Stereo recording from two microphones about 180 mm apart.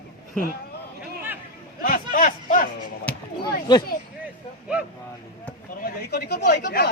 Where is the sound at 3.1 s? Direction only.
5° left (ahead or behind).